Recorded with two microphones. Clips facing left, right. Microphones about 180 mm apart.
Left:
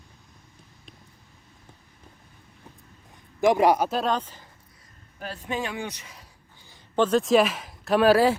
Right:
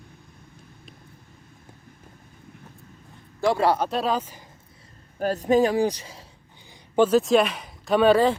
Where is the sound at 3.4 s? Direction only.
15° left (ahead or behind).